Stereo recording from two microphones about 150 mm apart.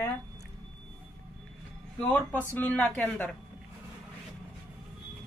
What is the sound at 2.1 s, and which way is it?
Speech, 10° left (ahead or behind).